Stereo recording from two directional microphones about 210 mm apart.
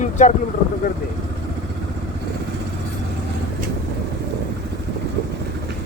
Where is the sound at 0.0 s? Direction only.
35° left (ahead or behind).